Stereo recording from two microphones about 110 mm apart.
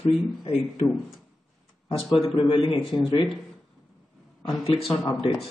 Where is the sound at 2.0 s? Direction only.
Centre (ahead or behind).